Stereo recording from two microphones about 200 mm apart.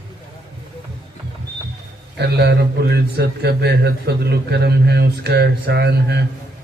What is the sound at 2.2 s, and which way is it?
Speech, 55° right (ahead or behind).